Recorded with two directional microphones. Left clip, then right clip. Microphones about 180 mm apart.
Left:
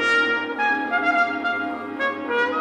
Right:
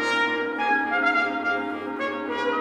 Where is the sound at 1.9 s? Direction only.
15° left (ahead or behind).